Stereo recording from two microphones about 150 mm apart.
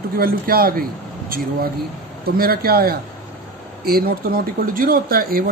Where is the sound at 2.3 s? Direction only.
85° right.